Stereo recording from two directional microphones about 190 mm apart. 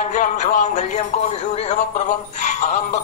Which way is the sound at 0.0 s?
40° left (ahead or behind).